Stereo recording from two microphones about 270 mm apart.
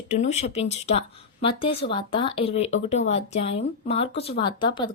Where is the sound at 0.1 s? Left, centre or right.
Left.